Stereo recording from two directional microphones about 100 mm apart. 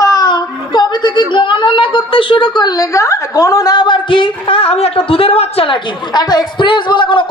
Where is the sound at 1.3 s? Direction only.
55° left (ahead or behind); by 5.8 s 75° left (ahead or behind).